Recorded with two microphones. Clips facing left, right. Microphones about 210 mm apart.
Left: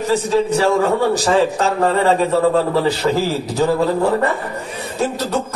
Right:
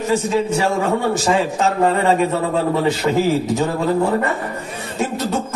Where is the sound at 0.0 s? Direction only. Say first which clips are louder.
Left 2 dB; 35° left (ahead or behind).